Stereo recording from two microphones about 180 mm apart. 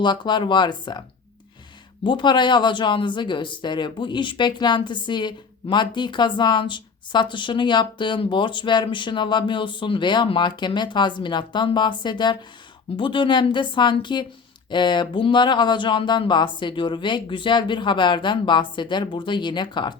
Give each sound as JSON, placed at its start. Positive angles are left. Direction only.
{"t": 0.0, "sound": "speech", "side_deg": 25}
{"t": 2.0, "sound": "speech", "side_deg": 25}